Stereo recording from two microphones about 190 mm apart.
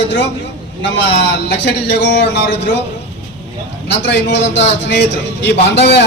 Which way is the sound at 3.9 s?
65° left (ahead or behind).